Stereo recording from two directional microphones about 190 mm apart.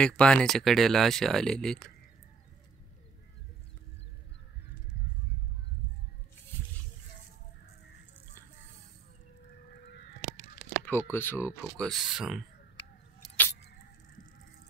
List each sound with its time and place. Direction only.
0.0 s speech: 5° left (ahead or behind)
9.7 s honk: 55° left (ahead or behind)
10.6 s speech: 10° left (ahead or behind)